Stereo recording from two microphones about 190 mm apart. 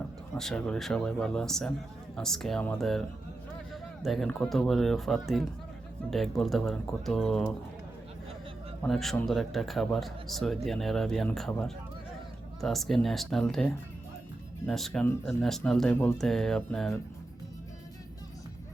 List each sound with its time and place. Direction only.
0.3 s a man's voice: 5° left (ahead or behind)
4.0 s a man's voice: centre (ahead or behind)
8.8 s a man's voice: centre (ahead or behind)